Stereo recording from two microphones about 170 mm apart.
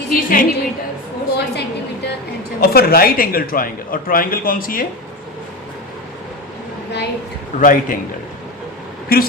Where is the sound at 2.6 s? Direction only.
65° left (ahead or behind).